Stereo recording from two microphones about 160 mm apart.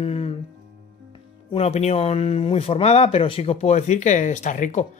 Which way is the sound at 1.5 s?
40° left (ahead or behind).